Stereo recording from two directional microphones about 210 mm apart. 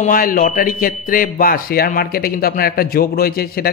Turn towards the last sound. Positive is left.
turn(degrees=45)  # may be behind; listen again after turning